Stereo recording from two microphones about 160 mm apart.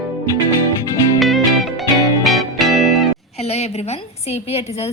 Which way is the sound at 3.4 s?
40° left (ahead or behind).